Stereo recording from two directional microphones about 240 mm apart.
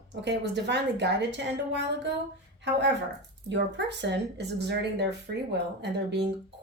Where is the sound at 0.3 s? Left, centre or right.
Right.